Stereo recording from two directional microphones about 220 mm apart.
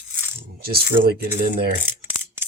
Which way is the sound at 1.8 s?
80° right.